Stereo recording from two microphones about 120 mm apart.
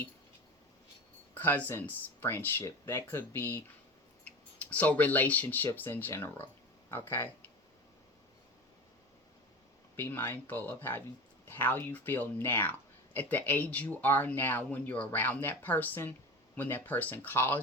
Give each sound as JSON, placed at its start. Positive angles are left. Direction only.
{"t": 1.3, "sound": "speech", "side_deg": 15}
{"t": 4.2, "sound": "tick-tock", "side_deg": 10}
{"t": 5.7, "sound": "speech", "side_deg": 15}
{"t": 9.9, "sound": "speech", "side_deg": 15}